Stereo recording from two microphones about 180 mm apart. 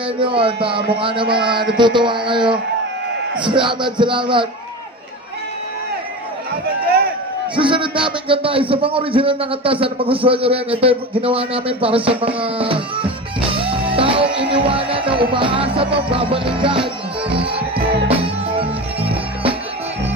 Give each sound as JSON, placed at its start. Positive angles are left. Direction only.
{"t": 0.2, "sound": "music", "side_deg": -30}
{"t": 7.5, "sound": "a man's voice", "side_deg": -30}
{"t": 13.6, "sound": "music", "side_deg": -30}
{"t": 18.2, "sound": "music", "side_deg": -30}